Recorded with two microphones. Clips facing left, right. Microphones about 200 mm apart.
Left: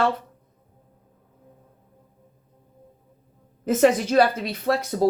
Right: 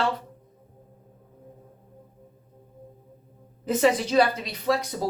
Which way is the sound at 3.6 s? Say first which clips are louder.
Left 4 dB; 50° left (ahead or behind).